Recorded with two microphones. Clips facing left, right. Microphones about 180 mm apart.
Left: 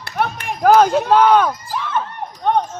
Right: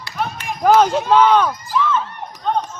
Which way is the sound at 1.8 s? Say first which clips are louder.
Right 6 dB; 55° left (ahead or behind).